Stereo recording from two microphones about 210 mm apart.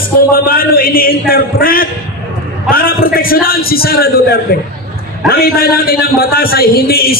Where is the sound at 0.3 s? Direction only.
45° left (ahead or behind).